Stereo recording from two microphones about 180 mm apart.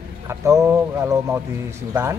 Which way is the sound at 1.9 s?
15° right (ahead or behind).